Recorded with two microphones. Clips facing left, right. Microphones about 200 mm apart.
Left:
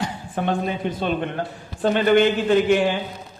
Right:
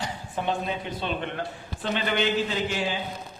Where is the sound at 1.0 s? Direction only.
45° left (ahead or behind).